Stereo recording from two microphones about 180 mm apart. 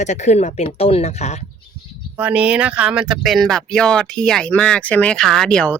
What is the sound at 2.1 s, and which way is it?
Speech, 10° right (ahead or behind).